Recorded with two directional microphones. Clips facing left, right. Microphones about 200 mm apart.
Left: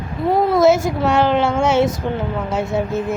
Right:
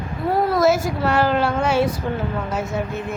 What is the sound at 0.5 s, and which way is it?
A woman's voice, 25° left (ahead or behind).